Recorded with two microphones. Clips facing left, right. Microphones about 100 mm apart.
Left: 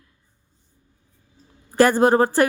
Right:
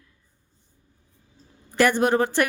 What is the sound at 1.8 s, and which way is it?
Speech, 35° left (ahead or behind).